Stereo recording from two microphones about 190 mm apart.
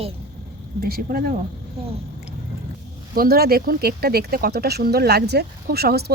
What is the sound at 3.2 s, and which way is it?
Speech, 55° right (ahead or behind).